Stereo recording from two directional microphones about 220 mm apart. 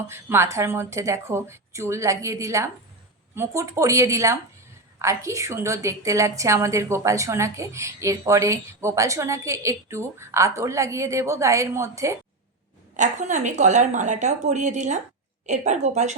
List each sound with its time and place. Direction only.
0.1 s a woman's voice: 10° right (ahead or behind)
13.0 s a woman's voice: 35° right (ahead or behind)